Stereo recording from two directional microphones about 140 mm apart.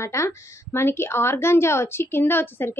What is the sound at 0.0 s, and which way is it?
A woman's voice, 20° left (ahead or behind).